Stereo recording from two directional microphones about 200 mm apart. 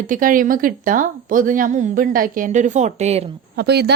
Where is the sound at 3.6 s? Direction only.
55° right (ahead or behind).